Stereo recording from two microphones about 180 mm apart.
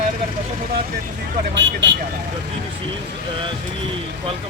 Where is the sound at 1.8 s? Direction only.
80° right.